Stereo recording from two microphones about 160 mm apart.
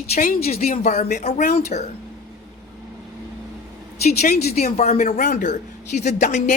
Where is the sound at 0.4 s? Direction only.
40° left (ahead or behind).